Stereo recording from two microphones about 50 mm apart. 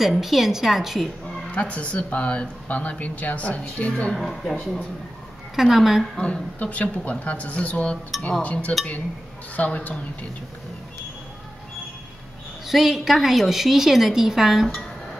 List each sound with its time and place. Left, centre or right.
0.0 s a woman's voice: centre
1.5 s speech: left
4.1 s a woman's voice: centre
6.1 s a woman's voice: centre
6.6 s speech: left
12.6 s a woman's voice: centre